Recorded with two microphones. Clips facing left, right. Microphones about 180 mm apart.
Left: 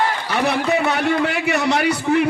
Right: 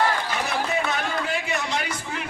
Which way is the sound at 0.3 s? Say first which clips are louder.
Left 8 dB; 65° left (ahead or behind).